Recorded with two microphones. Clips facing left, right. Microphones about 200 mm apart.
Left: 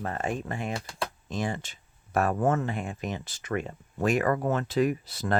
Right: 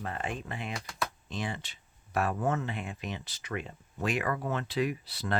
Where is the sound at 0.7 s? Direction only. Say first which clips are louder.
Left 3 dB; 30° left (ahead or behind).